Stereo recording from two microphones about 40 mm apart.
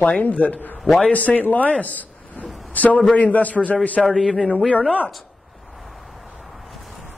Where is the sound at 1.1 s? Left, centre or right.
Left.